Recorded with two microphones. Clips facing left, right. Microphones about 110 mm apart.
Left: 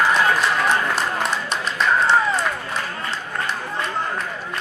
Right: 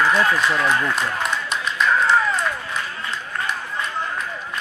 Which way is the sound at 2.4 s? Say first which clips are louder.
Left 1 dB; 45° left (ahead or behind).